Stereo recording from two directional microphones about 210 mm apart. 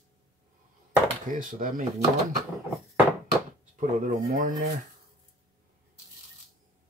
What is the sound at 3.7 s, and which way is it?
Speech, 35° right (ahead or behind).